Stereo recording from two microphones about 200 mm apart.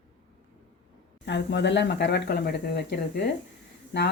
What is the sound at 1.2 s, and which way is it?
Speech, 60° left (ahead or behind).